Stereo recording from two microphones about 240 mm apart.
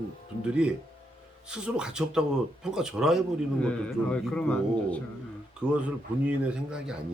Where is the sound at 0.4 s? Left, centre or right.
Centre.